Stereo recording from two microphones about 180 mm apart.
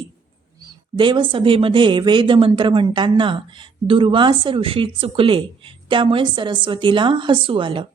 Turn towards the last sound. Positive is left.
turn(degrees=-30)  # may be behind; listen again after turning